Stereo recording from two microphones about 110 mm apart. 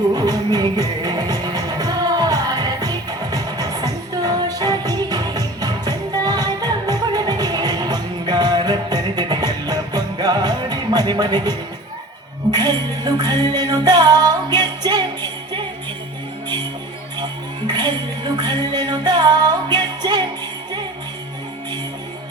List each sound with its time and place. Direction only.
0.2 s music: 35° right (ahead or behind)
17.7 s music: 40° right (ahead or behind)